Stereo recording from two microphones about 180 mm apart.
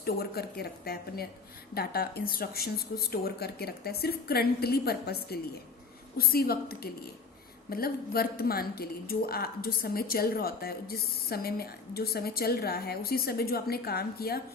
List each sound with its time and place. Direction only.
0.0 s a woman's voice: 60° left (ahead or behind)